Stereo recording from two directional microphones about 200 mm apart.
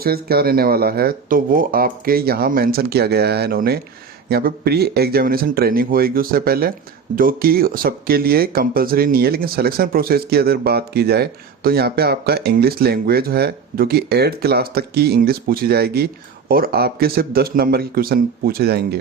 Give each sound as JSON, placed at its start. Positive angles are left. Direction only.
{"t": 0.0, "sound": "speech", "side_deg": -50}